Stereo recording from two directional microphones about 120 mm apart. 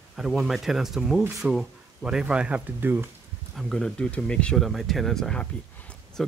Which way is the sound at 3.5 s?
5° left (ahead or behind).